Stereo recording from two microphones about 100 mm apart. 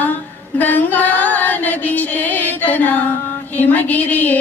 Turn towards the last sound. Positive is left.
turn(degrees=15)  # may be behind; listen again after turning